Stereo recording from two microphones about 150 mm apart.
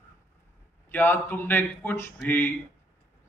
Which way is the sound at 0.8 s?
15° left (ahead or behind).